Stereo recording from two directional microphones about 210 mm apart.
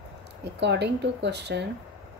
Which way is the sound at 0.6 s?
55° right (ahead or behind).